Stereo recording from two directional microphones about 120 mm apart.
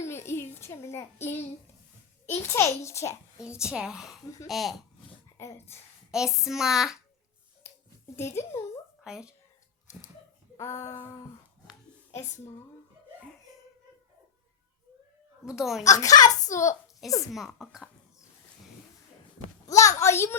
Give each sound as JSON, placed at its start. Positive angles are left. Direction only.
{"t": 0.0, "sound": "a sound", "side_deg": 20}
{"t": 2.2, "sound": "a child's voice", "side_deg": 20}
{"t": 3.6, "sound": "speech", "side_deg": -5}
{"t": 5.4, "sound": "a child's voice", "side_deg": 20}
{"t": 6.1, "sound": "speech", "side_deg": -5}
{"t": 7.6, "sound": "a sound", "side_deg": 20}
{"t": 8.1, "sound": "a child's voice", "side_deg": 20}
{"t": 9.0, "sound": "speech", "side_deg": -5}
{"t": 10.6, "sound": "a child's voice", "side_deg": 25}
{"t": 15.4, "sound": "speech", "side_deg": -5}
{"t": 15.9, "sound": "a child's voice", "side_deg": 30}
{"t": 17.3, "sound": "speech", "side_deg": 0}
{"t": 19.6, "sound": "a sound", "side_deg": 25}
{"t": 20.0, "sound": "a child's voice", "side_deg": 20}